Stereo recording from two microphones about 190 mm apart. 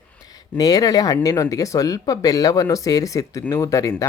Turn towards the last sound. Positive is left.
turn(degrees=15)  # may be behind; listen again after turning